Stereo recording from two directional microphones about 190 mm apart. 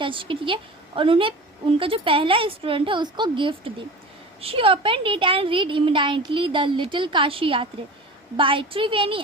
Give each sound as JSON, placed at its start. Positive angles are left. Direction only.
{"t": 0.0, "sound": "a child's voice", "side_deg": -25}